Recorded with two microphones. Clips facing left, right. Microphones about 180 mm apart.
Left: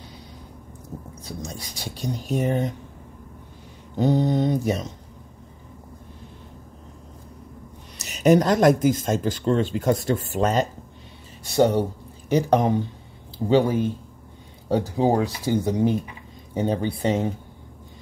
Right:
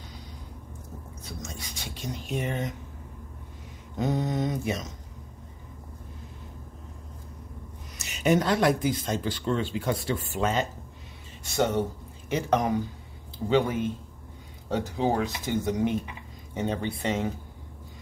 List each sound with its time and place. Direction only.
1.2 s speech: 35° left (ahead or behind)
3.9 s speech: 30° left (ahead or behind)
8.0 s speech: 40° left (ahead or behind)